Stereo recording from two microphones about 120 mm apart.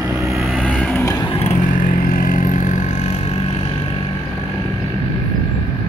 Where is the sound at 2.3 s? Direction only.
90° left; by 3.2 s 75° left (ahead or behind).